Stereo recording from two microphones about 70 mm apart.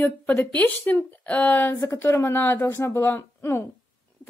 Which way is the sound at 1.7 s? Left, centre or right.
Left.